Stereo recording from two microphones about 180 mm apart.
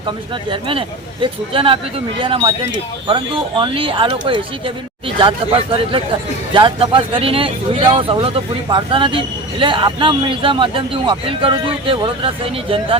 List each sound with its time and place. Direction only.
0.5 s a man's voice: 30° right (ahead or behind)
3.6 s a man's voice: 30° right (ahead or behind)